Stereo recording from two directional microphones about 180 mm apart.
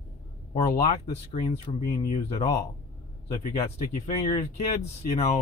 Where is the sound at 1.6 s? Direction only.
35° left (ahead or behind).